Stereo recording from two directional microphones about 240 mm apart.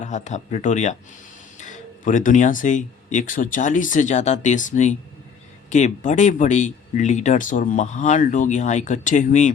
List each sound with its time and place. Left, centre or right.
0.0 s speech: left